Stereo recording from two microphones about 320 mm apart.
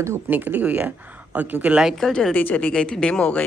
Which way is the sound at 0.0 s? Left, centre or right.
Centre.